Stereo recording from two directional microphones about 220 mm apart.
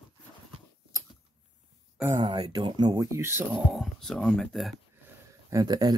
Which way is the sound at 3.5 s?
Centre (ahead or behind).